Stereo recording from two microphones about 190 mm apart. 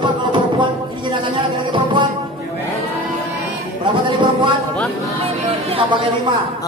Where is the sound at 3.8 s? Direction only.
25° right (ahead or behind).